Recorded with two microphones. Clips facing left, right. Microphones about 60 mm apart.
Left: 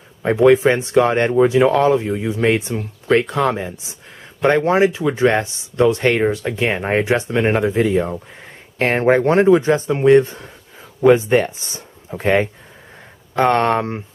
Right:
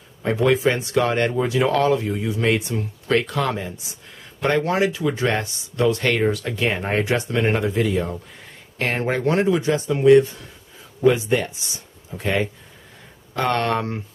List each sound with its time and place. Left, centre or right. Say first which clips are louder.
0.4 s speech: left 7 dB; left